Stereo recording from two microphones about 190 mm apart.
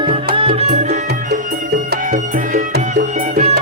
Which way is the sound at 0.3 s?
30° right (ahead or behind).